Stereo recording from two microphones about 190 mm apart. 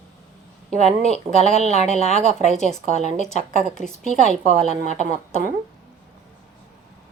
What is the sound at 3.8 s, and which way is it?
Speech, centre (ahead or behind).